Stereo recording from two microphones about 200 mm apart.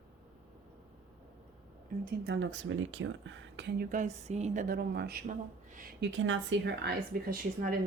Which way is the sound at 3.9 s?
35° right (ahead or behind).